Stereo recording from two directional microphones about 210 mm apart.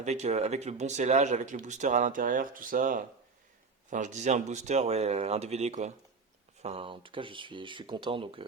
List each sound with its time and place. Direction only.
0.0 s speech: 35° right (ahead or behind)